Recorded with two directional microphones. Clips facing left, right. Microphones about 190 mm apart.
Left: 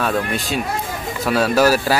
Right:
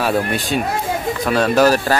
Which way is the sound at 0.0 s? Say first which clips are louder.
Right 2 dB; 5° right (ahead or behind).